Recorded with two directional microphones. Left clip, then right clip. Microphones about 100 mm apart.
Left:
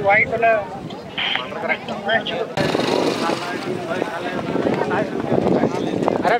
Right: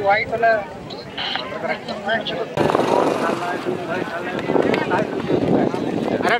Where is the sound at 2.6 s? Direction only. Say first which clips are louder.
Right 3 dB; 50° left (ahead or behind).